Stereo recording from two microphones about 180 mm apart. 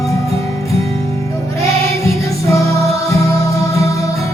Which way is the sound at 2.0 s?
15° left (ahead or behind).